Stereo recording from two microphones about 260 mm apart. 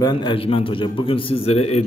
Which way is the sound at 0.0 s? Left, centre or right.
Centre.